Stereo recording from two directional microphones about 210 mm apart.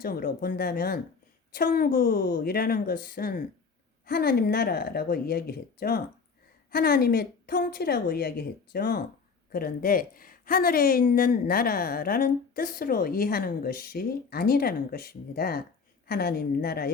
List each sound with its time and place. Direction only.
0.0 s a woman's voice: 45° left (ahead or behind)